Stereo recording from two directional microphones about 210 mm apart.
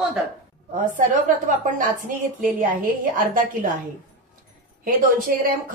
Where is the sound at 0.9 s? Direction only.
40° right (ahead or behind).